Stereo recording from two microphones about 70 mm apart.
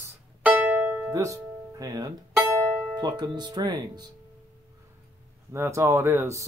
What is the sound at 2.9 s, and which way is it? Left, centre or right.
Speech, right.